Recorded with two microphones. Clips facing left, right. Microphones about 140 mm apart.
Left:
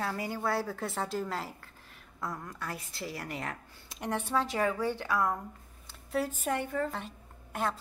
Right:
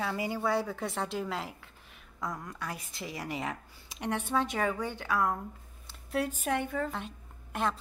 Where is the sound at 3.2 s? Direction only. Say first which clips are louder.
Right 3 dB; 5° right (ahead or behind).